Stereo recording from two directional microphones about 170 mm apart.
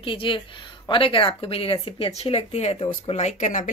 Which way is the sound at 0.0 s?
30° left (ahead or behind).